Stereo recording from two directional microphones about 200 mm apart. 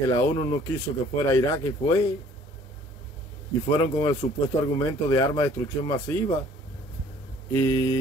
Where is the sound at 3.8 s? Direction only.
15° left (ahead or behind).